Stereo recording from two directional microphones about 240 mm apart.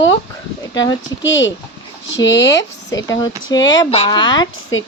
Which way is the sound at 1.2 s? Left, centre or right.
Left.